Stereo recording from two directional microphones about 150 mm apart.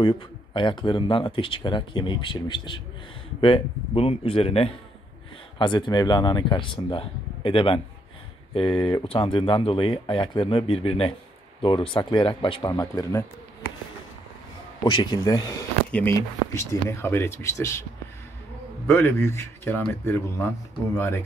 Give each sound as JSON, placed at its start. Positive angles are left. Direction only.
{"t": 0.0, "sound": "speech", "side_deg": 35}
{"t": 14.8, "sound": "speech", "side_deg": 30}
{"t": 15.9, "sound": "speech", "side_deg": 10}
{"t": 18.9, "sound": "speech", "side_deg": 15}